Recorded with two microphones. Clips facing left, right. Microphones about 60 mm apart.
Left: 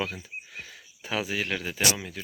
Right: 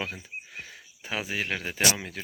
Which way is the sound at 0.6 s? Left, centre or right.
Right.